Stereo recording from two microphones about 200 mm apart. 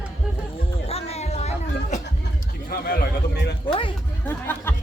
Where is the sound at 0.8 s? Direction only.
30° left (ahead or behind).